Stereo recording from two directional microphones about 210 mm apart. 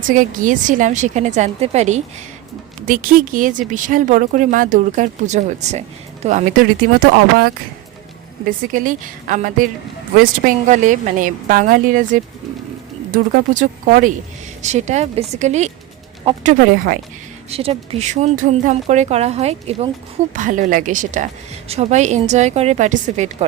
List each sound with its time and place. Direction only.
0.1 s speech: 40° right (ahead or behind)
8.7 s speech: 40° right (ahead or behind)
17.5 s speech: 30° right (ahead or behind)